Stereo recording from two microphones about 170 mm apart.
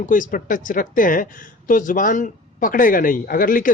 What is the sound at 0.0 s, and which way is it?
A woman's voice, 50° left (ahead or behind).